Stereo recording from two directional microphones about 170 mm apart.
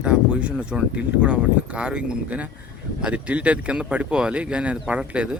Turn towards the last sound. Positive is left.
turn(degrees=-5)  # may be behind; listen again after turning